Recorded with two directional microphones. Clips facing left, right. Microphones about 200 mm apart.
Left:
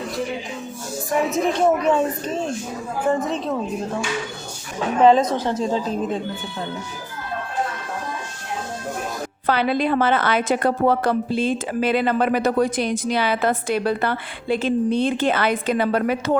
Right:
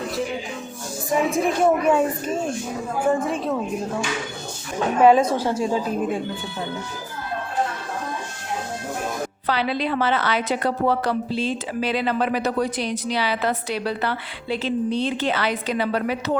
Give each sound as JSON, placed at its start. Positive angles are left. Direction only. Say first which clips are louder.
{"t": 1.3, "sound": "a woman's voice", "louder": "left 1 dB", "side_deg": -10}
{"t": 4.9, "sound": "a woman's voice", "louder": "even", "side_deg": -10}
{"t": 9.5, "sound": "a woman's voice", "louder": "left 4 dB", "side_deg": 50}